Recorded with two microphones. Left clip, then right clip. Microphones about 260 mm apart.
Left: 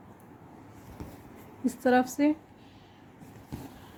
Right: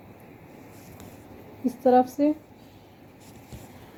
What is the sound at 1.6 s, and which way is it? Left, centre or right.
Speech, left.